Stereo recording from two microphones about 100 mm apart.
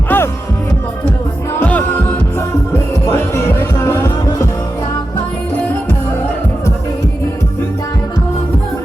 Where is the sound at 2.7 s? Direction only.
25° left (ahead or behind).